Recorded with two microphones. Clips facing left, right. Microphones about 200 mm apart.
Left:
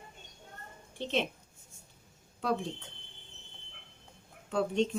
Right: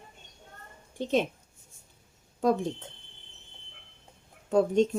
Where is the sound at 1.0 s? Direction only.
45° right (ahead or behind).